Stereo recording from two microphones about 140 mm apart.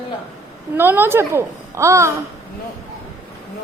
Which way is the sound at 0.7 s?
15° right (ahead or behind).